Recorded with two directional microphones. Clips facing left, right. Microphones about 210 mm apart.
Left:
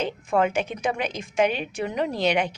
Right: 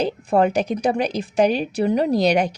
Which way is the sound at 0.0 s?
35° right (ahead or behind).